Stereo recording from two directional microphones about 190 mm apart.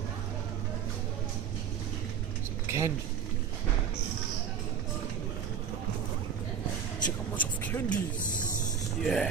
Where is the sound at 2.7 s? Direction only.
15° right (ahead or behind).